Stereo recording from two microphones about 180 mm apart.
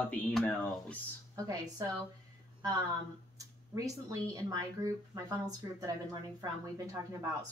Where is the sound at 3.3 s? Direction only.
20° right (ahead or behind).